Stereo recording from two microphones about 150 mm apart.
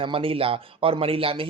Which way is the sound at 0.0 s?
35° right (ahead or behind).